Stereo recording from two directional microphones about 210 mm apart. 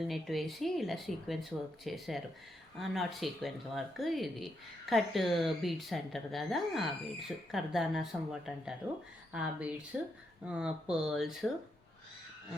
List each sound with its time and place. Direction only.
0.0 s speech: centre (ahead or behind)